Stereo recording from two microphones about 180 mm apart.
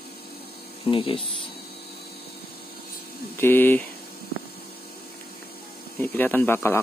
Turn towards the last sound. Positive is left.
turn(degrees=15)  # may be behind; listen again after turning